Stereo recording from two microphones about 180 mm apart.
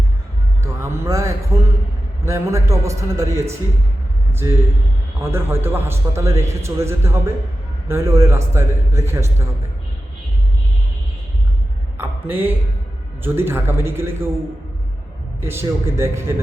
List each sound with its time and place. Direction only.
0.6 s music: 15° right (ahead or behind)
2.2 s a man's voice: 15° right (ahead or behind)
11.9 s a sound: 10° right (ahead or behind)
13.2 s a man's voice: 10° right (ahead or behind)
15.4 s a man's voice: 15° right (ahead or behind)